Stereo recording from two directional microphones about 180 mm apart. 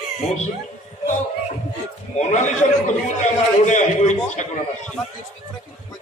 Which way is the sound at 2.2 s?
40° left (ahead or behind).